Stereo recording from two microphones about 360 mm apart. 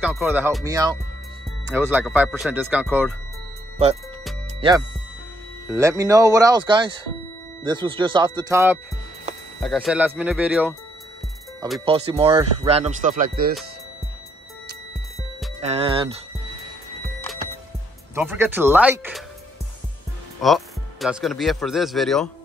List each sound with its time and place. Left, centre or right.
0.0 s speech: centre
4.6 s speech: centre
11.8 s speech: centre
15.6 s speech: centre
18.1 s speech: centre
20.4 s speech: centre